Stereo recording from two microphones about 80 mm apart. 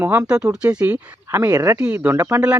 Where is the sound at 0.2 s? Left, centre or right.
Centre.